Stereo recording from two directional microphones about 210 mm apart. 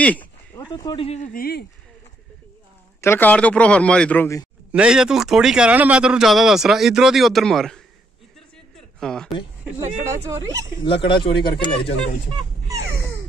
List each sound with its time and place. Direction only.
0.0 s a sound: 5° left (ahead or behind)
0.9 s speech: 30° left (ahead or behind); by 1.7 s 45° left (ahead or behind)
3.0 s a man's voice: 10° left (ahead or behind)
4.7 s speech: 5° right (ahead or behind)
8.7 s a sound: centre (ahead or behind)
9.8 s speech: 15° right (ahead or behind)
10.9 s speech: 25° left (ahead or behind)